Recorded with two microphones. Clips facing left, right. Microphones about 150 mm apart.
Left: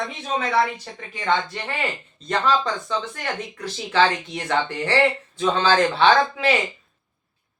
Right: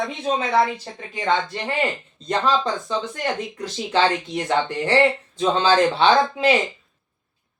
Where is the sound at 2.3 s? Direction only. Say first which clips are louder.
Right 1 dB; 20° right (ahead or behind).